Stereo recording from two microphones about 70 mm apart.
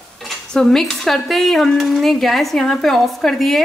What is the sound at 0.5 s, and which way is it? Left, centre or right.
Speech, centre.